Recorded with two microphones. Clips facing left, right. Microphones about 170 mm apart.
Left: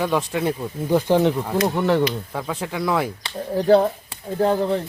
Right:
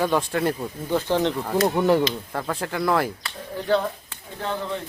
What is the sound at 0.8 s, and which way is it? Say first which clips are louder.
Speech: left 5 dB; 10° left (ahead or behind).